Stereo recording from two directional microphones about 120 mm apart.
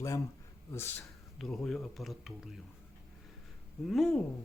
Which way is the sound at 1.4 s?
5° left (ahead or behind).